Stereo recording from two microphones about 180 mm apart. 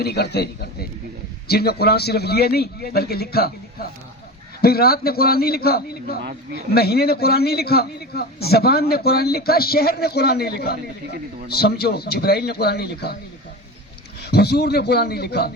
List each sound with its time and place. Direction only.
0.0 s a man's voice: 65° left (ahead or behind)
14.3 s a man's voice: 65° left (ahead or behind)